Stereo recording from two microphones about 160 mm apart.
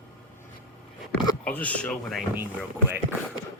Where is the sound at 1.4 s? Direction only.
10° left (ahead or behind).